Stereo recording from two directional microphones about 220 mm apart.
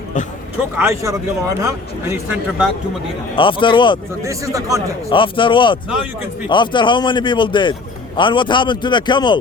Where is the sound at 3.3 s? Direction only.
20° left (ahead or behind).